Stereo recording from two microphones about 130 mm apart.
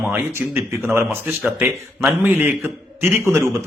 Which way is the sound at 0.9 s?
20° right (ahead or behind).